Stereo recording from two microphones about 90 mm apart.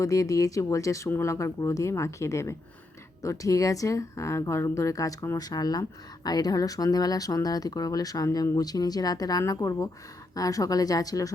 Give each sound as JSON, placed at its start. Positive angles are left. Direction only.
{"t": 0.0, "sound": "speech", "side_deg": 40}